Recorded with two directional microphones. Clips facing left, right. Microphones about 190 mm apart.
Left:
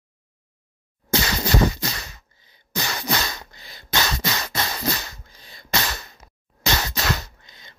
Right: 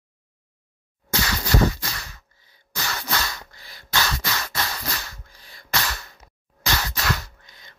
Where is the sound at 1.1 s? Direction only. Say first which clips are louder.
Left 2 dB; 20° left (ahead or behind).